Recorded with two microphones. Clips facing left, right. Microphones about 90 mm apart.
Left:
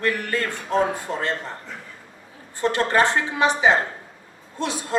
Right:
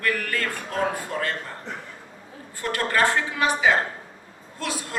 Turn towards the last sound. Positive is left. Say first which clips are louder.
# left 4 dB
turn(degrees=25)  # may be behind; listen again after turning